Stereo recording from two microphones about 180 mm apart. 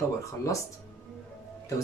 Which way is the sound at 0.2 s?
15° left (ahead or behind).